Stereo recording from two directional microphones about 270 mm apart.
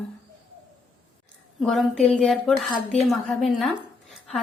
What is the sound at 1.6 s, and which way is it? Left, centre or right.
Speech, centre.